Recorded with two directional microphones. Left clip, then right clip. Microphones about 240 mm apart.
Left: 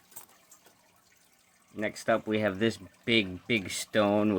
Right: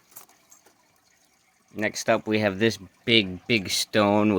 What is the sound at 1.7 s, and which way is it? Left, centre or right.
Speech, right.